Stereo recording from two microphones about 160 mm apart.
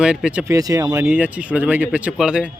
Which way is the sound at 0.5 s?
20° right (ahead or behind).